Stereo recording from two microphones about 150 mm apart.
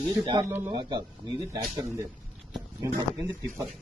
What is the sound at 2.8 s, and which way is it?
Speech, 20° right (ahead or behind).